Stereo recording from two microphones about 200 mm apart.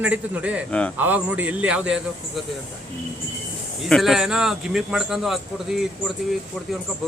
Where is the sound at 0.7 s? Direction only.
5° left (ahead or behind).